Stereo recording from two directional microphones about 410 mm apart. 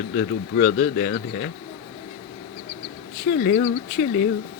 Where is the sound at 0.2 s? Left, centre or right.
Left.